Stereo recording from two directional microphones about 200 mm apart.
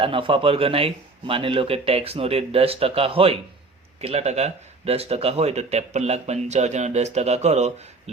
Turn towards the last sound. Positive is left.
turn(degrees=-35)  # may be behind; listen again after turning